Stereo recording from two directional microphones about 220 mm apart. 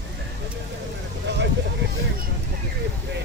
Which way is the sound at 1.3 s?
50° right (ahead or behind).